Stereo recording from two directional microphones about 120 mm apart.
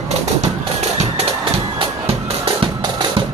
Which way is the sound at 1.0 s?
55° right (ahead or behind).